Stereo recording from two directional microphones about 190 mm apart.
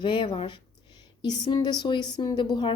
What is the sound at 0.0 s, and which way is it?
Speech, 25° left (ahead or behind).